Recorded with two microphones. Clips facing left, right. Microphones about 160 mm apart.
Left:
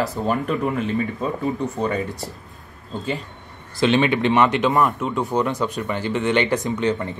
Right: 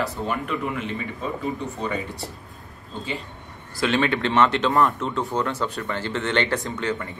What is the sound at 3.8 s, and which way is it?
Speech, 20° left (ahead or behind).